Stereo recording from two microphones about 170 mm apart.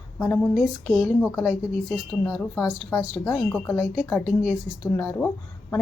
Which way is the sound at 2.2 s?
15° left (ahead or behind).